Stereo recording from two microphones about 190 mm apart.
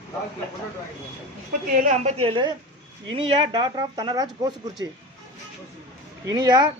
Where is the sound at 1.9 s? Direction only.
35° right (ahead or behind); by 4.9 s 20° right (ahead or behind).